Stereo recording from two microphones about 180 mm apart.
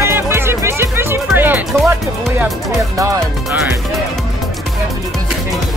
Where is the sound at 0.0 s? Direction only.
15° right (ahead or behind).